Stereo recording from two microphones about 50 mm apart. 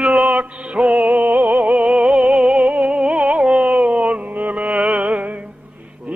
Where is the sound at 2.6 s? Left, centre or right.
Right.